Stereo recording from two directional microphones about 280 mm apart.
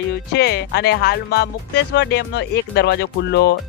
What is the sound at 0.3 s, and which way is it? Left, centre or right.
Speech, left.